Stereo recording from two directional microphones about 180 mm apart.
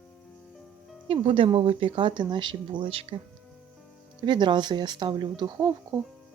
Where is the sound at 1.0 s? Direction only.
30° right (ahead or behind).